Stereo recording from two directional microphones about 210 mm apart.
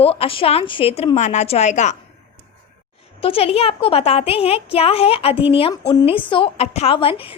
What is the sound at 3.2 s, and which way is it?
A woman's voice, 25° left (ahead or behind).